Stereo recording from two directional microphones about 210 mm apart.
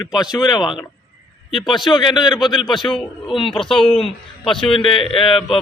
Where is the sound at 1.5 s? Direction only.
25° left (ahead or behind).